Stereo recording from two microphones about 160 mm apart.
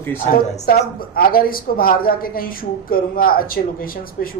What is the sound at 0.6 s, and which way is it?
A woman's voice, 70° left (ahead or behind).